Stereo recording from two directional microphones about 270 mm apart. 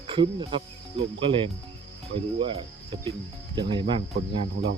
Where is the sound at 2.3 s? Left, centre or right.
Centre.